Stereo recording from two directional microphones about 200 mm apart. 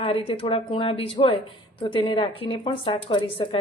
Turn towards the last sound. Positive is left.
turn(degrees=30)  # may be behind; listen again after turning